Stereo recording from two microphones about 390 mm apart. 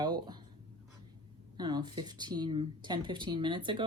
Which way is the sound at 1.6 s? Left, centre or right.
Centre.